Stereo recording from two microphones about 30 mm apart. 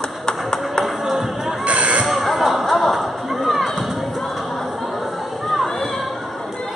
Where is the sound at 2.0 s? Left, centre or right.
Centre.